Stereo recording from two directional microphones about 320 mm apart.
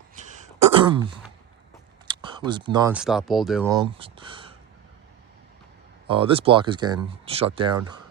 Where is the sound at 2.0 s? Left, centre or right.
Centre.